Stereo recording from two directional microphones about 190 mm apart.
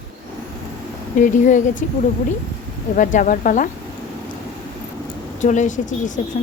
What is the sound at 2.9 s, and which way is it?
Speech, 45° left (ahead or behind).